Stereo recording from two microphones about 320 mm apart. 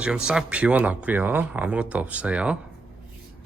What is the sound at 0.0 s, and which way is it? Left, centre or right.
Speech, centre.